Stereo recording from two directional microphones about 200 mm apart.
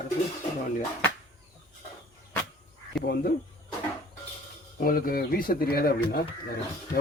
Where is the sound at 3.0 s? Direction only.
50° left (ahead or behind).